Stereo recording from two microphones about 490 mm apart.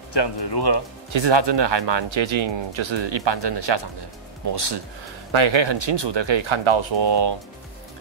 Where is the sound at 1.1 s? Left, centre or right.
Right.